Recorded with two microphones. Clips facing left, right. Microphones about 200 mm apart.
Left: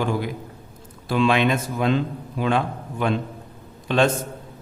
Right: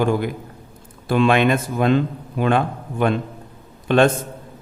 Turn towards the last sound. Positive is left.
turn(degrees=-55)  # may be behind; listen again after turning